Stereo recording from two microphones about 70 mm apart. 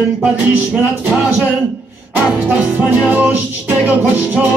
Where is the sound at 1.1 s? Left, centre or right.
Right.